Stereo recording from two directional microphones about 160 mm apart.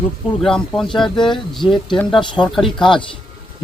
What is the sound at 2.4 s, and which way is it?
Speech, centre (ahead or behind).